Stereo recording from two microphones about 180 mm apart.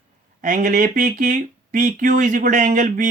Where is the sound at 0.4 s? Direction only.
45° right (ahead or behind).